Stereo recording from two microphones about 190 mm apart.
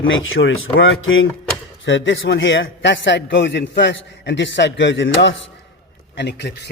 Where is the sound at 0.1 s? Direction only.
90° left.